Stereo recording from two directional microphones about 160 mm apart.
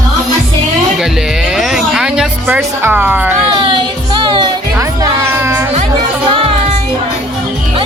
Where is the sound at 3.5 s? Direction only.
30° right (ahead or behind).